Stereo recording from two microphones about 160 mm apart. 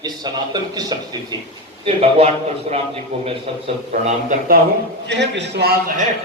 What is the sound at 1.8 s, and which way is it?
A man's voice, 40° right (ahead or behind).